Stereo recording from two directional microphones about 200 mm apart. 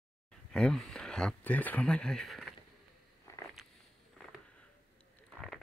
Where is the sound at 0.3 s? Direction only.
5° left (ahead or behind).